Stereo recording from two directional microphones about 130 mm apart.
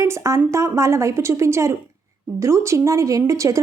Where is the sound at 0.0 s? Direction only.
25° right (ahead or behind).